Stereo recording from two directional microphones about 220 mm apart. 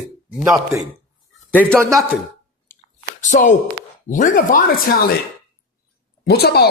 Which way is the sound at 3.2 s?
35° left (ahead or behind).